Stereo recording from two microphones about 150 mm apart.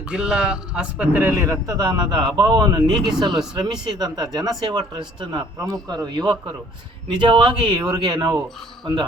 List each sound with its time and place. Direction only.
0.1 s a man's voice: 5° right (ahead or behind); by 9.0 s 25° right (ahead or behind)